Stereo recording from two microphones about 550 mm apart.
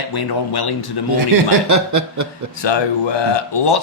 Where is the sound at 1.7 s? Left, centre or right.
Right.